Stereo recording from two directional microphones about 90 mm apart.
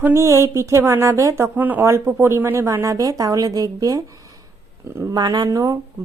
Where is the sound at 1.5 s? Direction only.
20° right (ahead or behind); by 5.2 s 35° right (ahead or behind).